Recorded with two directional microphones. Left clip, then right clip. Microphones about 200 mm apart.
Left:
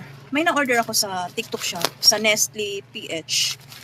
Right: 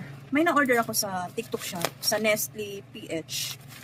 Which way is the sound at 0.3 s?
5° right (ahead or behind).